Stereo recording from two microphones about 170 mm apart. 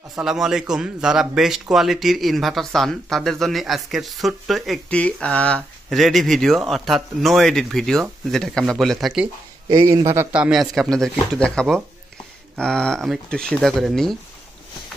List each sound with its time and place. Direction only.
0.2 s a man's voice: 5° right (ahead or behind)
9.7 s a man's voice: 20° right (ahead or behind)
10.3 s a man's voice: 5° right (ahead or behind)